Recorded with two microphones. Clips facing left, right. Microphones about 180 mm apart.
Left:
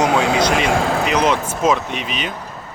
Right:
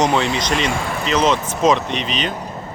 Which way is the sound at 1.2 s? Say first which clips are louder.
Right 1 dB; 10° left (ahead or behind).